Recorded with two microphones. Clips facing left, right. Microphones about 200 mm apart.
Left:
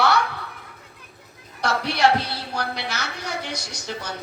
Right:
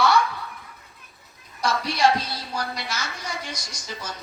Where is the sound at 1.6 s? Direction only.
65° left (ahead or behind).